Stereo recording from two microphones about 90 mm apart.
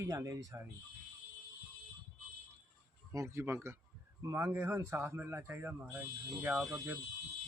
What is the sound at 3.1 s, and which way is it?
Speech, 30° right (ahead or behind).